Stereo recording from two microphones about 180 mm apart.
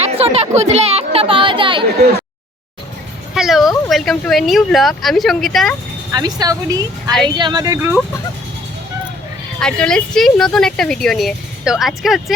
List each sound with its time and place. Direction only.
0.0 s speech: 35° right (ahead or behind)
3.3 s a sound: centre (ahead or behind)
3.8 s speech: centre (ahead or behind)
6.1 s speech: 20° right (ahead or behind)
9.6 s speech: 5° left (ahead or behind)